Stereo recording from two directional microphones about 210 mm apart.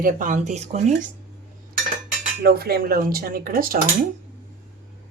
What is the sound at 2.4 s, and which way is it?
Speech, 45° right (ahead or behind).